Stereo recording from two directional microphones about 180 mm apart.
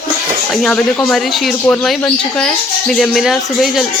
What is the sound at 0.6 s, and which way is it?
Speech, 5° left (ahead or behind).